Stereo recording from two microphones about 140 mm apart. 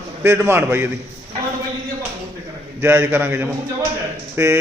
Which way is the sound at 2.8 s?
15° right (ahead or behind).